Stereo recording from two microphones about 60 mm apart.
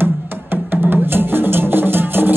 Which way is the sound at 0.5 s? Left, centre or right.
Right.